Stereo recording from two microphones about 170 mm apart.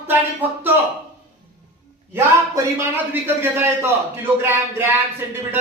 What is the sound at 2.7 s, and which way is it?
A man's voice, 10° right (ahead or behind).